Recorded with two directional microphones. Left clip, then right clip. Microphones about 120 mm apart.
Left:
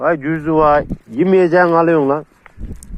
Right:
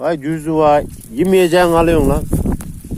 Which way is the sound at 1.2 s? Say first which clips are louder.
Even; 60° right (ahead or behind).